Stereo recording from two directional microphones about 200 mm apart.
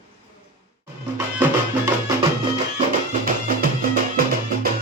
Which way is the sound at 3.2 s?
45° right (ahead or behind).